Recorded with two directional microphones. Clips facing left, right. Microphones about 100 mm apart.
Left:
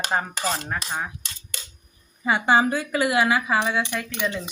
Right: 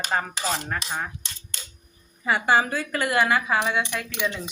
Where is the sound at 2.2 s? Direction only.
20° left (ahead or behind).